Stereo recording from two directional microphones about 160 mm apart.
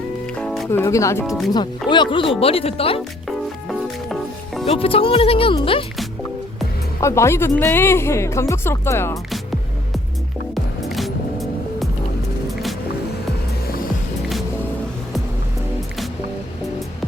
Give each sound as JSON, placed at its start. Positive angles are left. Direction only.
{"t": 0.3, "sound": "music", "side_deg": 0}
{"t": 0.7, "sound": "speech", "side_deg": 15}
{"t": 3.2, "sound": "music", "side_deg": 0}
{"t": 4.8, "sound": "speech", "side_deg": 35}
{"t": 7.0, "sound": "speech", "side_deg": 20}
{"t": 9.3, "sound": "music", "side_deg": 0}